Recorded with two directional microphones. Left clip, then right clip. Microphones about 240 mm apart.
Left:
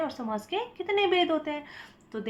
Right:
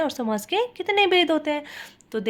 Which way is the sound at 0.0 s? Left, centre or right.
Right.